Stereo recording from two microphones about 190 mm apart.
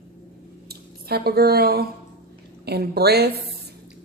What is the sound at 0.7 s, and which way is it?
Speech, 55° right (ahead or behind).